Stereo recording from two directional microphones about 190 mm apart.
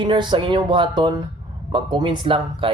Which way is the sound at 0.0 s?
25° right (ahead or behind).